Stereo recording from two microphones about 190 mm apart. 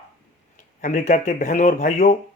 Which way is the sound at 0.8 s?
40° left (ahead or behind).